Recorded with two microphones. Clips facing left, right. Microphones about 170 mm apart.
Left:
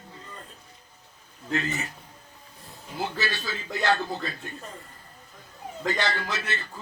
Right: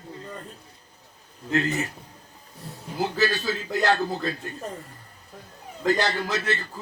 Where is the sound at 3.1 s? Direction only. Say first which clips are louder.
Right 8 dB; 40° right (ahead or behind).